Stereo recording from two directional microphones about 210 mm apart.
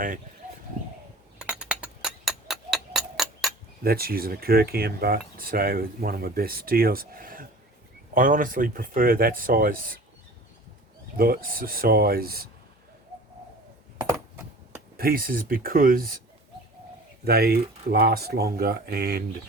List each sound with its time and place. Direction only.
1.4 s a sound: 5° right (ahead or behind)
3.8 s speech: 45° right (ahead or behind)
11.2 s speech: 45° right (ahead or behind)
14.9 s speech: 45° right (ahead or behind)
17.2 s speech: 50° right (ahead or behind)